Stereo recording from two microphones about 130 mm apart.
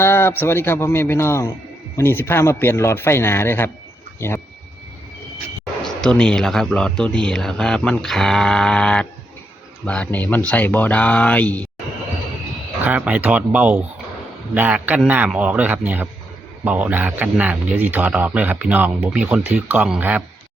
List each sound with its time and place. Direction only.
0.0 s speech: 20° left (ahead or behind)
5.8 s speech: 5° left (ahead or behind)
12.8 s speech: 10° right (ahead or behind)